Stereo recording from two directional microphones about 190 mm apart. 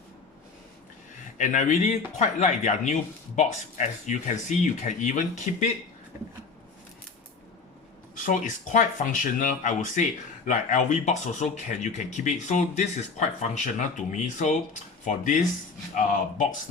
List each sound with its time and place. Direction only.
1.4 s speech: 40° left (ahead or behind)
8.1 s speech: 45° left (ahead or behind)